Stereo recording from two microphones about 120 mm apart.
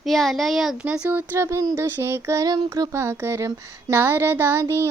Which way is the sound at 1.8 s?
20° right (ahead or behind).